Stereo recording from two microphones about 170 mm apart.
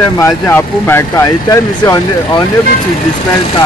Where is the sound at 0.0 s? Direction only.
15° left (ahead or behind).